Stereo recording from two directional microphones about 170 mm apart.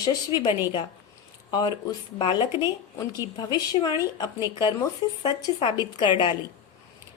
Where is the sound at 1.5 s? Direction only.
25° left (ahead or behind).